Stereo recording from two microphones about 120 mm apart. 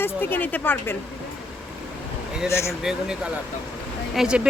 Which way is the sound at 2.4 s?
20° left (ahead or behind).